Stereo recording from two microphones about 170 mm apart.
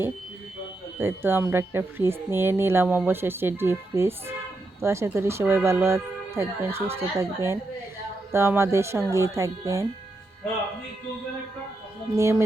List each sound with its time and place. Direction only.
0.9 s speech: 15° right (ahead or behind)
12.1 s speech: 15° right (ahead or behind)